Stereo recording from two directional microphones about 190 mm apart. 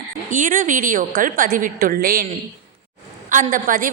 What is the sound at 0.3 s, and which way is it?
A woman's voice, 45° right (ahead or behind).